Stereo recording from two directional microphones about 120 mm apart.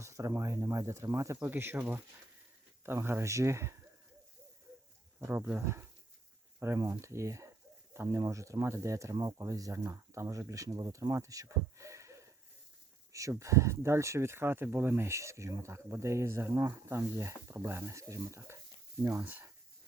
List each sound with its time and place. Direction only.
0.0 s speech: 25° right (ahead or behind)
5.3 s speech: 20° right (ahead or behind)